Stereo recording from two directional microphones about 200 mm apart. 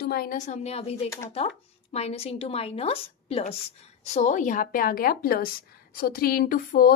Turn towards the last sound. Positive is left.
turn(degrees=50)  # may be behind; listen again after turning